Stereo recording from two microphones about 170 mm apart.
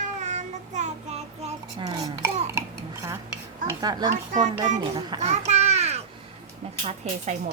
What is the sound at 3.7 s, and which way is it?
A child's voice, 25° right (ahead or behind).